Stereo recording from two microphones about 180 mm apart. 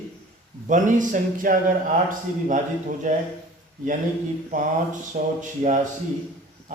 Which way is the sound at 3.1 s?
45° right (ahead or behind).